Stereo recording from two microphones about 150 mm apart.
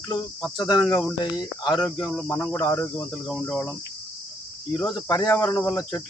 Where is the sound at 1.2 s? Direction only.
25° left (ahead or behind).